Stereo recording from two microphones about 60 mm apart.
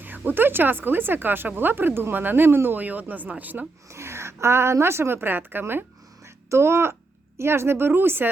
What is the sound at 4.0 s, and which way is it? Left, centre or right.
A woman's voice, right.